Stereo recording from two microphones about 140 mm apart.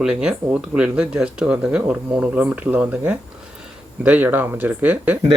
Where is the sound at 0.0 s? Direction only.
5° right (ahead or behind).